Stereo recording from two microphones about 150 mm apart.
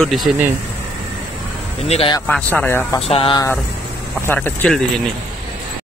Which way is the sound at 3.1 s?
40° left (ahead or behind).